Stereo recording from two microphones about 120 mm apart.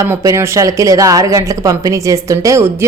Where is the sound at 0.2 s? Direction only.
25° right (ahead or behind).